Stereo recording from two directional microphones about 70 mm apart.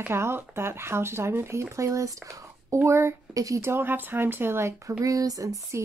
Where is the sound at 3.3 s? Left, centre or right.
Right.